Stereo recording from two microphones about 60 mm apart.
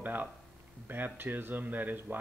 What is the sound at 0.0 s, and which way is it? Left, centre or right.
Speech, right.